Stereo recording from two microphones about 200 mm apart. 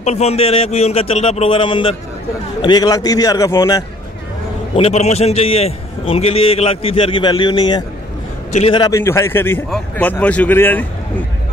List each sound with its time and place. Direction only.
0.0 s a man's voice: 35° left (ahead or behind)
4.7 s a man's voice: 30° left (ahead or behind); by 10.9 s 10° left (ahead or behind)